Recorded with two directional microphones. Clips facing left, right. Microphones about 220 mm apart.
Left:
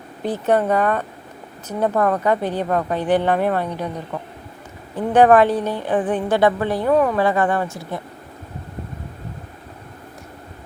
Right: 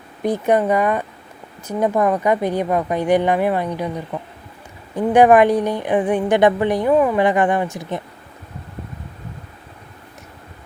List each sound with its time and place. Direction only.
0.2 s a woman's voice: 15° right (ahead or behind)